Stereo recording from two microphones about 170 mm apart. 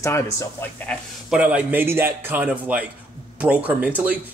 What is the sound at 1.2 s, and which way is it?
Speech, 5° right (ahead or behind).